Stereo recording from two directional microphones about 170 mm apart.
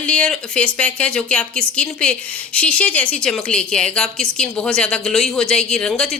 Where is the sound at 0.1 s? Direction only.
5° left (ahead or behind).